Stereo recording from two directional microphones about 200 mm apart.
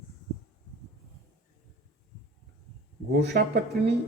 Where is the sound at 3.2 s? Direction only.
55° right (ahead or behind).